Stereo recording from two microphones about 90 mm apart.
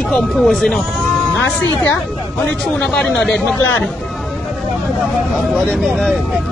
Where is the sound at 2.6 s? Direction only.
10° left (ahead or behind).